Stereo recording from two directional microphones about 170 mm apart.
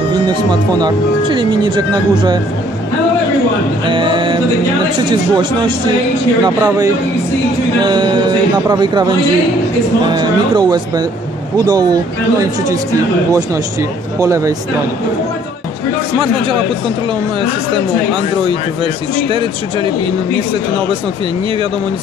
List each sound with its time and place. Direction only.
0.3 s speech: 25° right (ahead or behind)
3.8 s speech: 30° right (ahead or behind)
7.8 s speech: 25° right (ahead or behind)